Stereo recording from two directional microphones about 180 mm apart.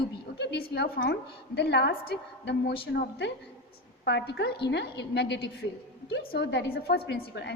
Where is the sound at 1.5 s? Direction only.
65° left (ahead or behind).